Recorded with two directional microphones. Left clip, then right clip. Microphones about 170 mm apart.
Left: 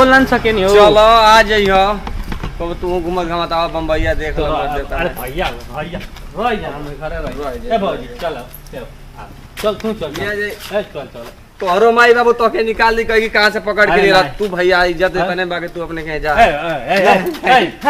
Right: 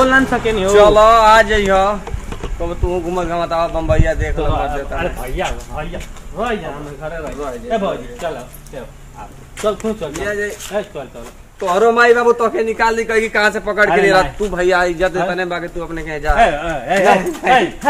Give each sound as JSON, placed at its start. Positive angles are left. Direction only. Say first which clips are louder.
{"t": 0.0, "sound": "speech", "louder": "left 3 dB", "side_deg": 90}
{"t": 0.7, "sound": "a man's voice", "louder": "even", "side_deg": 30}
{"t": 7.4, "sound": "a man's voice", "louder": "left 2 dB", "side_deg": 20}
{"t": 9.6, "sound": "a man's voice", "louder": "left 1 dB", "side_deg": 25}
{"t": 10.1, "sound": "speech", "louder": "left 1 dB", "side_deg": 10}
{"t": 10.7, "sound": "a man's voice", "louder": "left 3 dB", "side_deg": 25}
{"t": 14.5, "sound": "speech", "louder": "left 2 dB", "side_deg": 15}
{"t": 16.3, "sound": "a man's voice", "louder": "left 2 dB", "side_deg": 35}